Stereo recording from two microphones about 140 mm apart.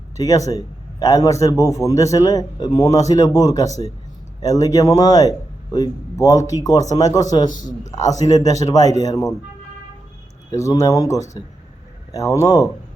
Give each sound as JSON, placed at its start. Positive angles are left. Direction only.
{"t": 0.2, "sound": "a man's voice", "side_deg": 25}
{"t": 10.5, "sound": "a man's voice", "side_deg": 25}